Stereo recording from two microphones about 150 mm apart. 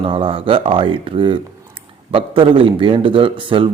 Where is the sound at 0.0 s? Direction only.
35° right (ahead or behind).